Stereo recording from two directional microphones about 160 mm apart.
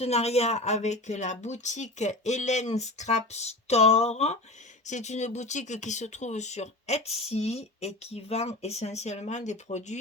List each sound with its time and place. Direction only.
0.0 s speech: 40° left (ahead or behind)